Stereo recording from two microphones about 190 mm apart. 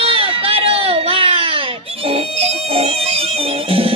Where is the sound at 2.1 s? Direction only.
30° right (ahead or behind).